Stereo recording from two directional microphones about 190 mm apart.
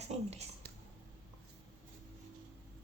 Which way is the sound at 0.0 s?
35° right (ahead or behind).